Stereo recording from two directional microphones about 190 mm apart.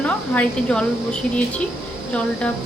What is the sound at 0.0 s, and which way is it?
Speech, 5° left (ahead or behind).